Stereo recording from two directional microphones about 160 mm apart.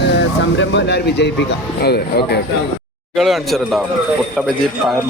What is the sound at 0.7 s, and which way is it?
Speech, 90° left.